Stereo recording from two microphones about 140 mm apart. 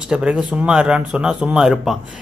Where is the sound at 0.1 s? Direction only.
10° right (ahead or behind).